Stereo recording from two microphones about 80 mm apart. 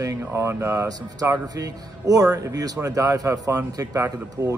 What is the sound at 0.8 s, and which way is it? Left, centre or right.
Speech, right.